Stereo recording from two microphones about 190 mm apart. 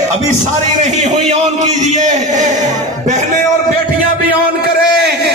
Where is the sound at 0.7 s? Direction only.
40° right (ahead or behind).